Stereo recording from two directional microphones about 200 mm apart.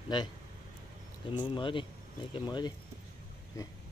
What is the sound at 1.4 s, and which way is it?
Speech, 25° left (ahead or behind).